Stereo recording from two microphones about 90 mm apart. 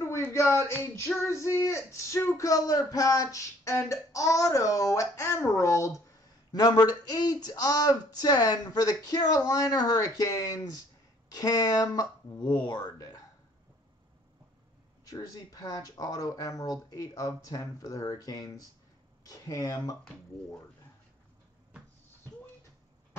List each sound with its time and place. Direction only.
0.0 s a sound: 30° left (ahead or behind)
0.7 s female singing: 30° left (ahead or behind)
1.2 s speech: 30° left (ahead or behind)
6.5 s speech: 50° left (ahead or behind)
15.0 s speech: 40° left (ahead or behind)